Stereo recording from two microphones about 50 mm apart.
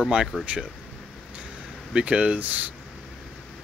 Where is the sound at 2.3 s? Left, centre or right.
Right.